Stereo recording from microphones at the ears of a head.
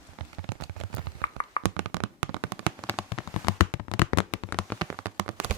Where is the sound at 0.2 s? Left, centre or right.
Right.